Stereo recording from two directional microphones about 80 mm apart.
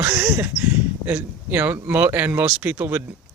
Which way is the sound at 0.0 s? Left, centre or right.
Right.